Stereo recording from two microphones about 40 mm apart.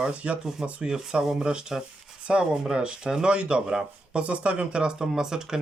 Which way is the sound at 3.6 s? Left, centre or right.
Centre.